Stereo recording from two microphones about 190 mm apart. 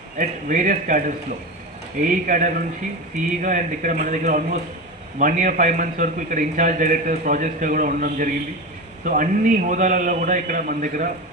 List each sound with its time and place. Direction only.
0.2 s a man's voice: 45° right (ahead or behind)